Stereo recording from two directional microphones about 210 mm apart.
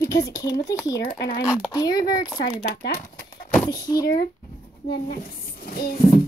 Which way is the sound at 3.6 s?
20° left (ahead or behind).